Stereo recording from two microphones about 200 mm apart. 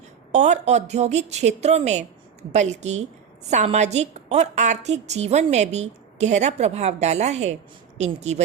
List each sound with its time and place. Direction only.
0.3 s a woman's voice: 35° right (ahead or behind)